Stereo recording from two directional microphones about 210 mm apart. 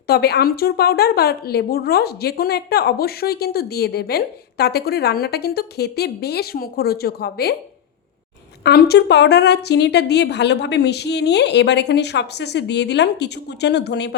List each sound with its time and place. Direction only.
0.1 s speech: 50° left (ahead or behind)
8.6 s speech: 50° left (ahead or behind)